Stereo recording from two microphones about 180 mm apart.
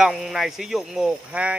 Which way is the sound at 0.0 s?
Centre (ahead or behind).